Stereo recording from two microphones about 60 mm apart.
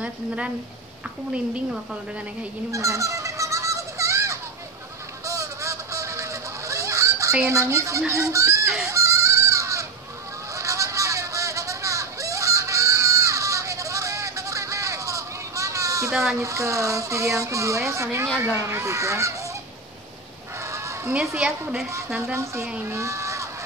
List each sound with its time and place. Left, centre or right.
1.3 s a woman's voice: centre
2.7 s honk: right
7.4 s speech: right
8.8 s goat: right
10.5 s a sound: right
16.1 s speech: centre
16.3 s speech: right
20.6 s fowl: right
21.4 s a woman's voice: centre
22.2 s a woman's voice: right
22.8 s a sound: right